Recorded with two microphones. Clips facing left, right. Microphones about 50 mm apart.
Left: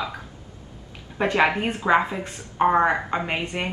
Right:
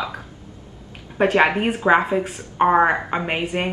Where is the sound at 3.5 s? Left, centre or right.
Right.